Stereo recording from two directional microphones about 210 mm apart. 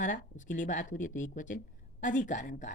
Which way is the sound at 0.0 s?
35° left (ahead or behind).